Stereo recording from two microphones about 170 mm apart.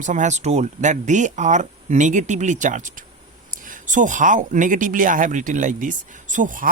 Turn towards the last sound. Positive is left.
turn(degrees=-50)  # may be behind; listen again after turning